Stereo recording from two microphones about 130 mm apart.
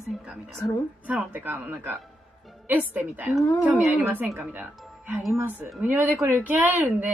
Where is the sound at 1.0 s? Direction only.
15° right (ahead or behind).